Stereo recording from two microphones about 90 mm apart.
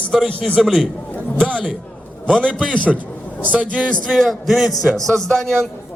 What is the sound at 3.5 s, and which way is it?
Speech, 15° right (ahead or behind).